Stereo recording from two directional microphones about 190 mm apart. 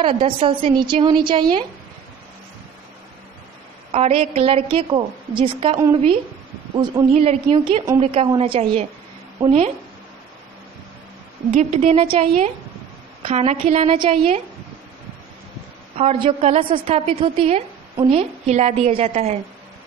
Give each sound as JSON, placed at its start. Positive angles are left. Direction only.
{"t": 0.0, "sound": "a woman's voice", "side_deg": -25}
{"t": 3.9, "sound": "a woman's voice", "side_deg": -30}
{"t": 7.2, "sound": "a woman's voice", "side_deg": -30}
{"t": 11.5, "sound": "a woman's voice", "side_deg": -35}
{"t": 16.0, "sound": "a woman's voice", "side_deg": -30}